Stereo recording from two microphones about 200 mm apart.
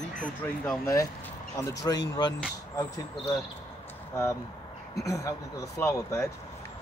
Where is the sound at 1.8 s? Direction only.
20° left (ahead or behind).